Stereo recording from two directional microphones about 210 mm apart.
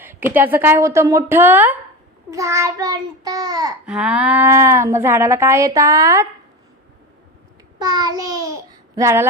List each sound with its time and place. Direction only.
0.0 s speech: 10° right (ahead or behind)
3.8 s speech: 5° right (ahead or behind)
7.8 s a child's voice: 20° right (ahead or behind)